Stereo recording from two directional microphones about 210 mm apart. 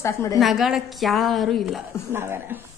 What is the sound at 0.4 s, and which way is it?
A woman's voice, centre (ahead or behind).